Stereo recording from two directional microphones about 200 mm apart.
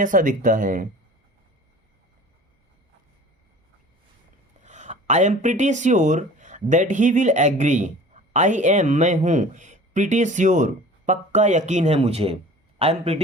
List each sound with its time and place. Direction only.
0.0 s speech: 40° right (ahead or behind)
4.6 s speech: 35° right (ahead or behind)